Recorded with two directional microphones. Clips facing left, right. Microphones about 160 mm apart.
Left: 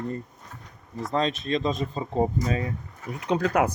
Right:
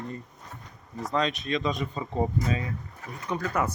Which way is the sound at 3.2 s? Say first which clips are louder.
Left 6 dB; 80° left.